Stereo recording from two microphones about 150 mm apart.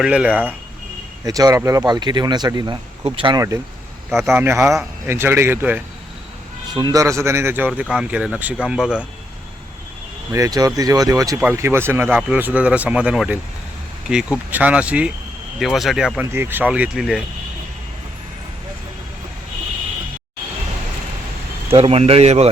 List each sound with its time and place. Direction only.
0.0 s speech: 5° right (ahead or behind)
1.2 s speech: 25° right (ahead or behind)
4.2 s speech: 15° right (ahead or behind)
6.7 s speech: 25° right (ahead or behind)
7.7 s speech: 5° right (ahead or behind)
10.3 s speech: 25° right (ahead or behind); by 16.2 s 5° right (ahead or behind)
16.3 s speech: 15° right (ahead or behind)
21.7 s speech: 40° right (ahead or behind)